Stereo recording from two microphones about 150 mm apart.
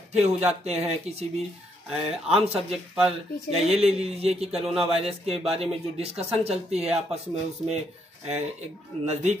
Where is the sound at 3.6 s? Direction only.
45° right (ahead or behind).